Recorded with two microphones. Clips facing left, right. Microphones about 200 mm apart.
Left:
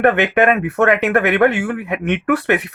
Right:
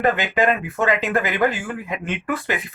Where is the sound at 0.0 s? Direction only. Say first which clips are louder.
Left 5 dB; 65° left (ahead or behind).